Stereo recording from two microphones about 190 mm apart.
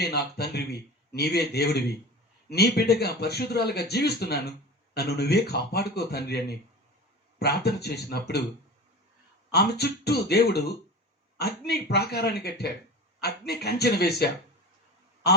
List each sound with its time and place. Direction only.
0.0 s speech: 60° left (ahead or behind)
9.5 s speech: 60° left (ahead or behind)